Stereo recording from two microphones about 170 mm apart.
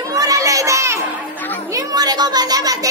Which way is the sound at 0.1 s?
20° right (ahead or behind).